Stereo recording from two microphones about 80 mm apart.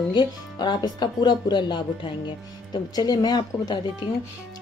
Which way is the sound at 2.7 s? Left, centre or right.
Left.